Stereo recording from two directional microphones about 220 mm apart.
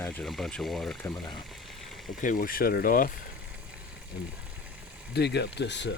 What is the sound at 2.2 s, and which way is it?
Speech, 40° left (ahead or behind).